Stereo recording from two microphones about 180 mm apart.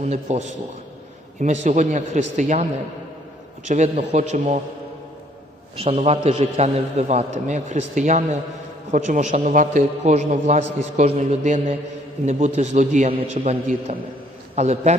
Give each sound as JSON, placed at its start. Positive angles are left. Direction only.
{"t": 0.0, "sound": "a man's voice", "side_deg": -40}
{"t": 3.7, "sound": "a man's voice", "side_deg": -40}
{"t": 5.7, "sound": "a man's voice", "side_deg": -35}